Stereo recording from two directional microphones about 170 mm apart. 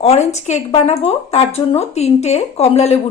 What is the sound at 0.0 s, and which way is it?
Speech, 40° left (ahead or behind).